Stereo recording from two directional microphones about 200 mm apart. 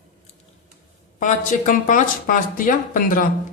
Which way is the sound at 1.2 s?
40° left (ahead or behind).